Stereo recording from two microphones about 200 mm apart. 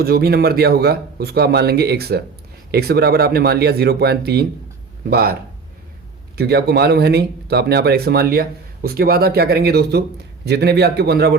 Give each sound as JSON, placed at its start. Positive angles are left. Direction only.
{"t": 0.0, "sound": "a man's voice", "side_deg": -50}